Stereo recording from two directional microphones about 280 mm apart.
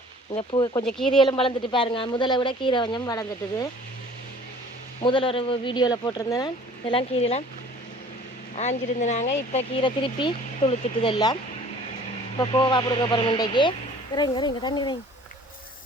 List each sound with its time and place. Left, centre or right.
0.3 s speech: centre
0.9 s speech: centre
1.2 s speech: centre
5.0 s speech: centre
8.5 s speech: left
12.4 s speech: centre